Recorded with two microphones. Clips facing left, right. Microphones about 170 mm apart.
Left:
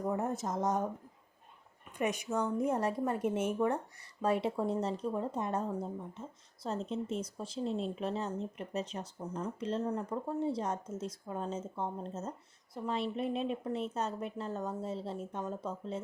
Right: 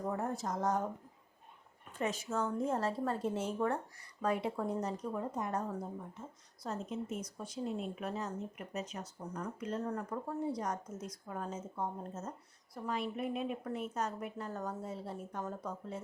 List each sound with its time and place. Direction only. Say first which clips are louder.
0.2 s a woman's voice: left 2 dB; 20° left (ahead or behind)
2.0 s a woman's voice: left 3 dB; 15° left (ahead or behind)